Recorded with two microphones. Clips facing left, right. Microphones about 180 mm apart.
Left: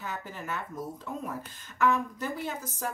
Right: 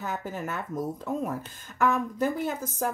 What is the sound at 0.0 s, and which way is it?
Speech, 45° right (ahead or behind).